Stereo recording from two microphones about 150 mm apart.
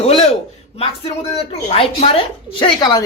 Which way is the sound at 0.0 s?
40° left (ahead or behind).